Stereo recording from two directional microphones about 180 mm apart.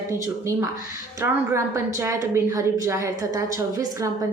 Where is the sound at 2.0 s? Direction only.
20° right (ahead or behind).